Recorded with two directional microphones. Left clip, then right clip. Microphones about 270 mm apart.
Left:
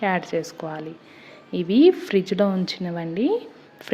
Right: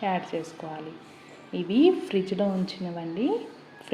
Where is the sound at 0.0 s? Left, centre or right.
Left.